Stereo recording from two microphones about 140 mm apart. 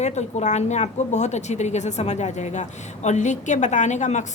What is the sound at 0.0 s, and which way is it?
Speech, 55° left (ahead or behind).